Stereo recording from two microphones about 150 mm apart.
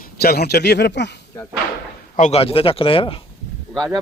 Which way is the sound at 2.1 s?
55° left (ahead or behind).